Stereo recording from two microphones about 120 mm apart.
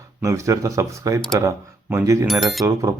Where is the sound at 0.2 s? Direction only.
25° right (ahead or behind).